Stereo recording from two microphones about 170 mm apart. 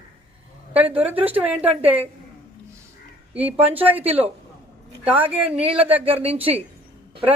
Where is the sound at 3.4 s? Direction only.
10° right (ahead or behind).